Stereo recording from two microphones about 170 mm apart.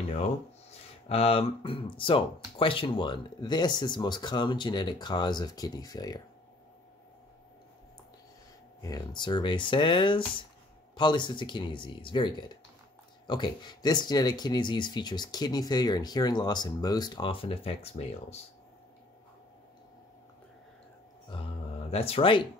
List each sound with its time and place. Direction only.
1.0 s speech: 35° left (ahead or behind)
8.8 s speech: 25° left (ahead or behind)
21.9 s speech: 35° left (ahead or behind)